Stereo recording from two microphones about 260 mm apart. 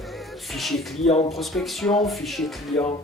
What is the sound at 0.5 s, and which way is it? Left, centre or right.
Speech, centre.